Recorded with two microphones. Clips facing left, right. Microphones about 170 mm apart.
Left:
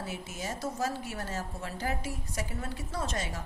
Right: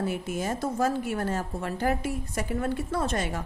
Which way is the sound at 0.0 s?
55° right (ahead or behind).